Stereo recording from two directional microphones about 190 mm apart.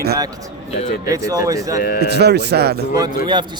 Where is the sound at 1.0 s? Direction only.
15° right (ahead or behind).